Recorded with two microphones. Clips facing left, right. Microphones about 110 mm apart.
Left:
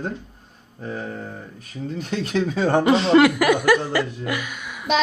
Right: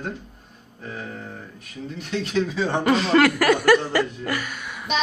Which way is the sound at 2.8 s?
25° left (ahead or behind).